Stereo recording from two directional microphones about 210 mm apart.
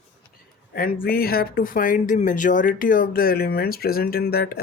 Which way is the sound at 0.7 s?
45° left (ahead or behind).